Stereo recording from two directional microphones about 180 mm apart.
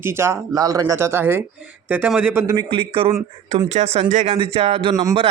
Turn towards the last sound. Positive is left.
turn(degrees=-25)  # may be behind; listen again after turning